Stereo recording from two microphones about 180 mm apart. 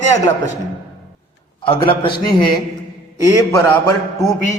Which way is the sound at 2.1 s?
55° left (ahead or behind).